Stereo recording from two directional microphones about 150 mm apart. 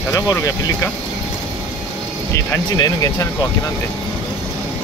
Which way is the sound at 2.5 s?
25° left (ahead or behind).